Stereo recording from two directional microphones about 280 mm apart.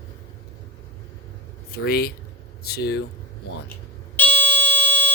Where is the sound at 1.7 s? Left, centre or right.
Left.